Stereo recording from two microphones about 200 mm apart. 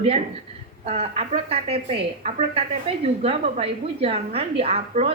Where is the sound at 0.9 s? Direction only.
30° right (ahead or behind).